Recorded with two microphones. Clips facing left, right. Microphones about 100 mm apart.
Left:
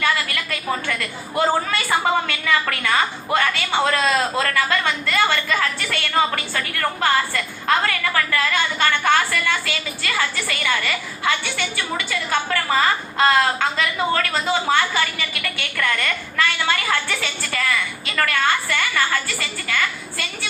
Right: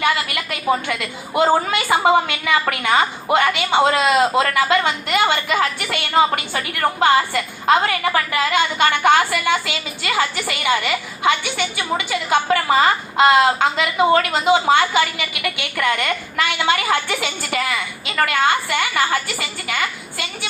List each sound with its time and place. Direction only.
0.0 s a woman's voice: 25° right (ahead or behind)